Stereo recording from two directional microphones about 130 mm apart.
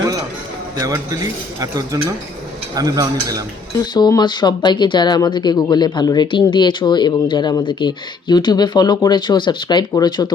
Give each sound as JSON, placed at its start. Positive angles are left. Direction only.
{"t": 0.8, "sound": "speech", "side_deg": -25}
{"t": 3.9, "sound": "speech", "side_deg": 35}